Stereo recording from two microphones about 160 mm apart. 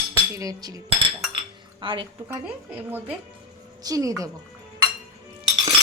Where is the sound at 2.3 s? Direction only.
10° right (ahead or behind).